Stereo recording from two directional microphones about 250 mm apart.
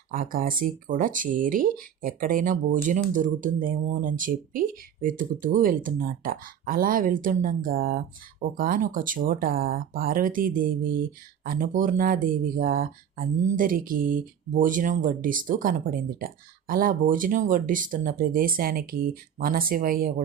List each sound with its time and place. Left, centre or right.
0.1 s speech: right